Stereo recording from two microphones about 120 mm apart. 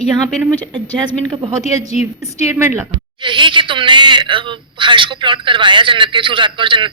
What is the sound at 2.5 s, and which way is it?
Speech, 20° right (ahead or behind).